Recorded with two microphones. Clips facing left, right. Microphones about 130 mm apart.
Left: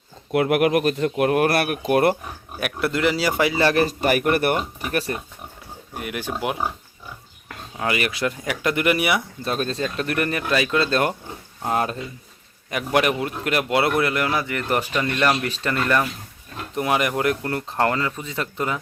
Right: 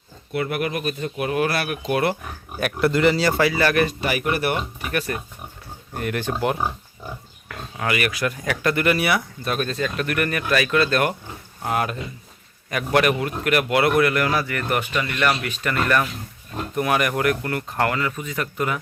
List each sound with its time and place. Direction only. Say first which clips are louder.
0.3 s speech: left 6 dB; 90° left; by 2.1 s 50° left (ahead or behind)
2.6 s speech: right 3 dB; 5° left (ahead or behind); by 3.9 s 30° left (ahead or behind)
4.0 s speech: left 4 dB; 50° left (ahead or behind)
4.8 s speech: left 1 dB; 35° left (ahead or behind)
5.9 s speech: right 3 dB; 10° left (ahead or behind)
7.8 s speech: even; 25° left (ahead or behind)